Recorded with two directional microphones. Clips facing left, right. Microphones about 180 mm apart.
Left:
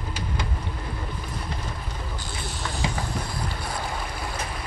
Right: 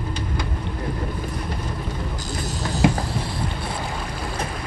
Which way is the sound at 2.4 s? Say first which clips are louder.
Right 5 dB; 40° right (ahead or behind).